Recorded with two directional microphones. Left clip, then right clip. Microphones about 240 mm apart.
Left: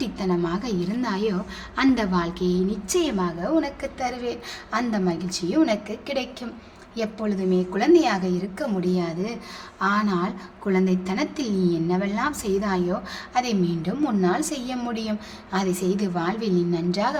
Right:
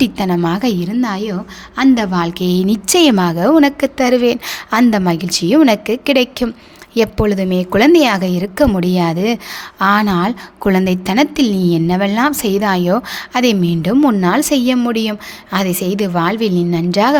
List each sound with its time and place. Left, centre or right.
0.0 s a woman's voice: right